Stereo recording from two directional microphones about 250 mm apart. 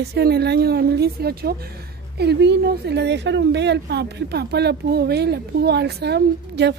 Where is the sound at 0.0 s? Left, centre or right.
Right.